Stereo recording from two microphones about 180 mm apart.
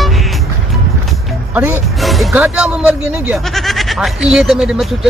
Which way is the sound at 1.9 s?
Centre (ahead or behind).